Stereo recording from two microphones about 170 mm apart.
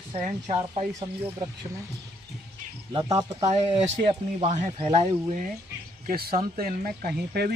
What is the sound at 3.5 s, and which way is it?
Speech, 35° right (ahead or behind).